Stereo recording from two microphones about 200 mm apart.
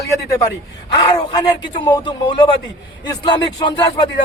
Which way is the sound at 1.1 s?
25° left (ahead or behind).